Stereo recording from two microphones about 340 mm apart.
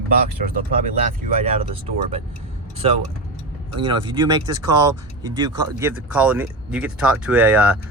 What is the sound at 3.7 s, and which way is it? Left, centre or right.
Speech, centre.